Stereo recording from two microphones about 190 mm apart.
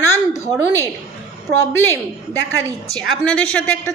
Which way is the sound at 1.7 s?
10° left (ahead or behind).